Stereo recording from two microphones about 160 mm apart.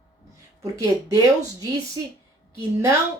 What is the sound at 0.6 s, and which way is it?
A woman's voice, 20° right (ahead or behind).